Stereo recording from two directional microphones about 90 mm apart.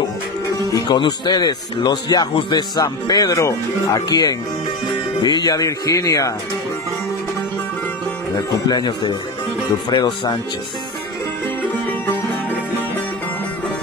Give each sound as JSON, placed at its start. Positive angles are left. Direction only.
{"t": 0.5, "sound": "speech", "side_deg": 45}
{"t": 8.4, "sound": "speech", "side_deg": 45}